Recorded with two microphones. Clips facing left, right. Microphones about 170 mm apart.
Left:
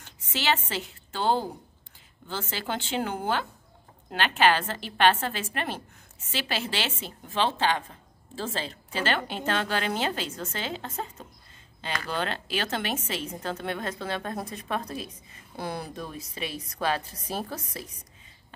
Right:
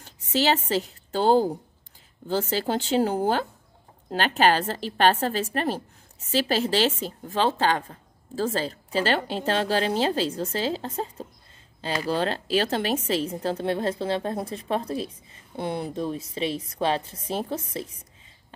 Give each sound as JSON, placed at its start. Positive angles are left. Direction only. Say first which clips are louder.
{"t": 0.0, "sound": "a woman's voice", "louder": "right 7 dB", "side_deg": -40}